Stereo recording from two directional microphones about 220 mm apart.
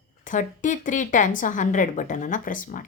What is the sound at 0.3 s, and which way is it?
Speech, 35° left (ahead or behind).